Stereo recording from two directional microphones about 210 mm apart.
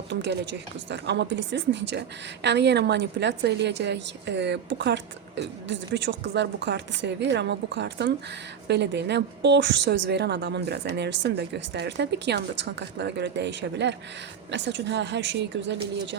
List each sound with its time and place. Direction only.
0.1 s a woman's voice: 55° right (ahead or behind)